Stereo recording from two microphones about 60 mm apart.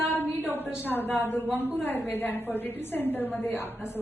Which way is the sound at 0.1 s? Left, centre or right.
Left.